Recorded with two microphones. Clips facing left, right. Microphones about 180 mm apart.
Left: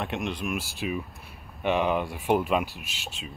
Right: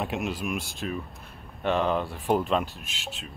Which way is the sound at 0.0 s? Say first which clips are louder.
Right 1 dB; centre (ahead or behind).